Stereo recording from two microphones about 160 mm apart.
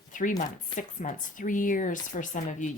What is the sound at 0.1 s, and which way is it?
Speech, 55° left (ahead or behind).